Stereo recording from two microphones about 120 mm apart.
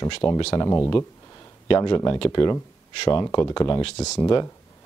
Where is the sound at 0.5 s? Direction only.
25° left (ahead or behind).